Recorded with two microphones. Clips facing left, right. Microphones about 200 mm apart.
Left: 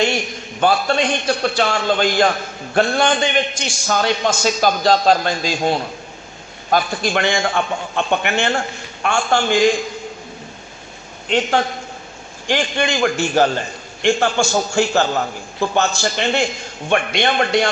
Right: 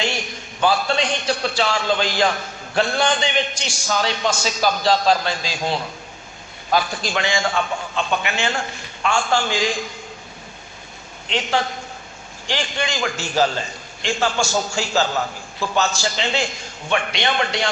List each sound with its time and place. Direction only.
0.6 s a man's voice: 50° left (ahead or behind)
12.5 s a man's voice: 55° left (ahead or behind)